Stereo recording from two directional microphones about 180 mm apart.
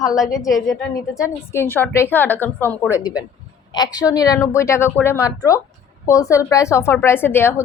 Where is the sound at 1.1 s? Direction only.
15° left (ahead or behind).